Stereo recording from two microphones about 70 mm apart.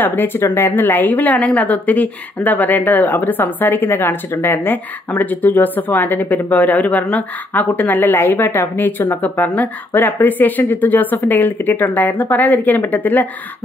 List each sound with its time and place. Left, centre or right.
0.0 s a woman's voice: left